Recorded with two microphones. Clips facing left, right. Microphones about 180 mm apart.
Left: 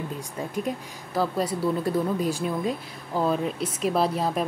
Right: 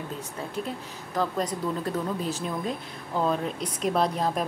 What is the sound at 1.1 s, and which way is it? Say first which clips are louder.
Speech: left 2 dB; 10° left (ahead or behind).